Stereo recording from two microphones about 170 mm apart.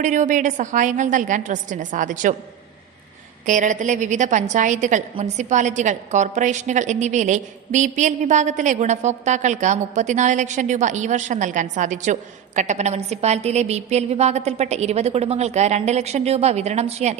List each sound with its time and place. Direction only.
0.0 s a woman's voice: 45° right (ahead or behind)
3.4 s a woman's voice: 45° right (ahead or behind)